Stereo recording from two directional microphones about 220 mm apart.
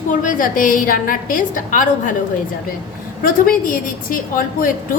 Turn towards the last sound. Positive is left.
turn(degrees=40)  # may be behind; listen again after turning